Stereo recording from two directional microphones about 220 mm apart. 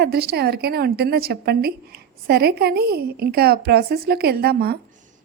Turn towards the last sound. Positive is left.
turn(degrees=-45)  # may be behind; listen again after turning